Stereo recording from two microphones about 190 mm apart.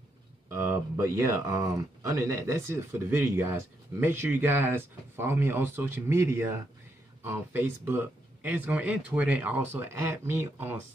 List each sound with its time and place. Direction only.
0.5 s speech: 15° right (ahead or behind)